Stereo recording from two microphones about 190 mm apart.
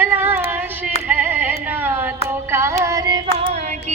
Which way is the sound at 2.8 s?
20° right (ahead or behind).